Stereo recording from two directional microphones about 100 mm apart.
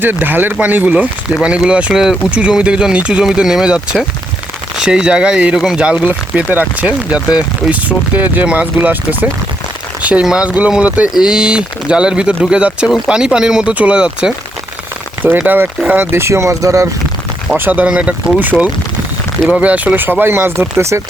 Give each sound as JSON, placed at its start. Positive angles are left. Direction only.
{"t": 0.0, "sound": "speech", "side_deg": -20}
{"t": 4.8, "sound": "speech", "side_deg": -10}
{"t": 17.6, "sound": "speech", "side_deg": -15}